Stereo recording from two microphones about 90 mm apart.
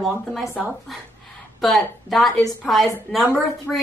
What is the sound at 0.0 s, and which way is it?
Speech, centre (ahead or behind).